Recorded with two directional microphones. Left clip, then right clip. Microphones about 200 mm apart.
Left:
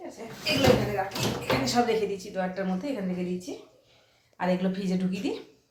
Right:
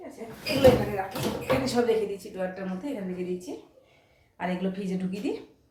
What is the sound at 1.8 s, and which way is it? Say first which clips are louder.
A woman's voice: even; 10° left (ahead or behind).